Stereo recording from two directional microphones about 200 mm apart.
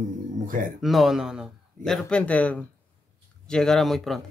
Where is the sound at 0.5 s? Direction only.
40° right (ahead or behind).